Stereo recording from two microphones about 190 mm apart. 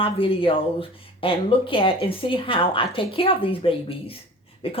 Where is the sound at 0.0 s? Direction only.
30° left (ahead or behind).